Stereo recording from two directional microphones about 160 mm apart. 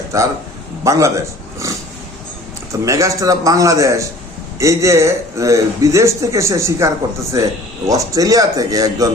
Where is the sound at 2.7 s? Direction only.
20° right (ahead or behind).